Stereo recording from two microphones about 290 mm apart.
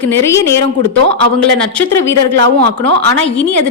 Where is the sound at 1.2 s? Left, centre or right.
Right.